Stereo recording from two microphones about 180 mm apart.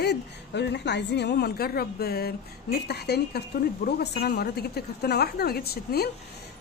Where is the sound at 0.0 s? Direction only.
70° left (ahead or behind).